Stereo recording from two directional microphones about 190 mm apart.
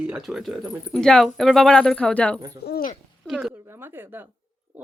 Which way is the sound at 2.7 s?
50° left (ahead or behind).